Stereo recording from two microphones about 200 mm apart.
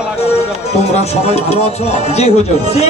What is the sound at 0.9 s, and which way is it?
Speech, 30° left (ahead or behind).